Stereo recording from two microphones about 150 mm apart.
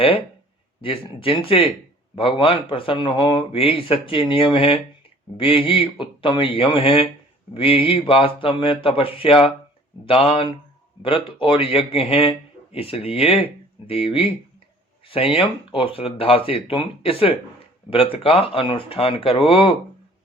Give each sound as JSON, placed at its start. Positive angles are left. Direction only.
{"t": 0.8, "sound": "speech", "side_deg": 35}